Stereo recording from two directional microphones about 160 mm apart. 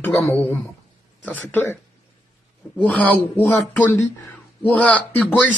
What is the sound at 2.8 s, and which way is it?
Speech, 10° left (ahead or behind).